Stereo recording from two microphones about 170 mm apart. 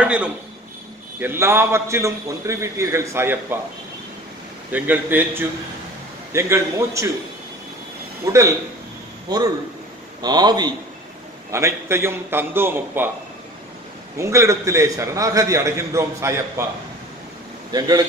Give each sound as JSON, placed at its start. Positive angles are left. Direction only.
{"t": 0.0, "sound": "a man's voice", "side_deg": -5}
{"t": 4.7, "sound": "a man's voice", "side_deg": -10}
{"t": 8.3, "sound": "a man's voice", "side_deg": -15}
{"t": 14.1, "sound": "a man's voice", "side_deg": -15}
{"t": 17.7, "sound": "a man's voice", "side_deg": -20}